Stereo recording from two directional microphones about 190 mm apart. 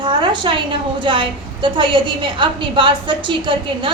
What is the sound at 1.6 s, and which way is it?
A woman's voice, 25° right (ahead or behind).